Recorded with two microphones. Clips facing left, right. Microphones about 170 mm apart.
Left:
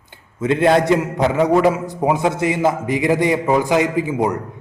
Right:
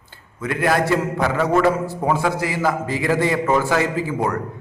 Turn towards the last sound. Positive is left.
turn(degrees=15)  # may be behind; listen again after turning